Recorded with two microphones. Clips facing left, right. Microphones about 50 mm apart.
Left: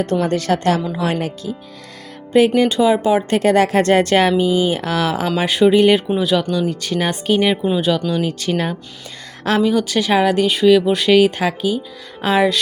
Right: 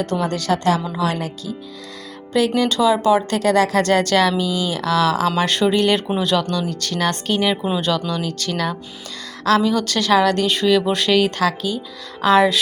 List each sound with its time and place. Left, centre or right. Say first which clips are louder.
0.0 s speech: left 3 dB; left
2.6 s speech: left 2 dB; left
5.4 s speech: left 9 dB; centre